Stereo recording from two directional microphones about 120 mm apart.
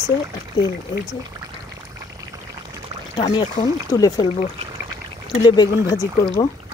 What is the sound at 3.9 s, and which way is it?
Speech, 30° left (ahead or behind).